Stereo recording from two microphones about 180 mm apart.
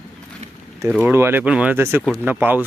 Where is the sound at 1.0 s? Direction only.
15° right (ahead or behind).